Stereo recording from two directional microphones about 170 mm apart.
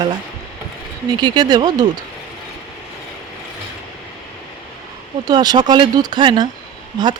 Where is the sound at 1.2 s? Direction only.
25° right (ahead or behind).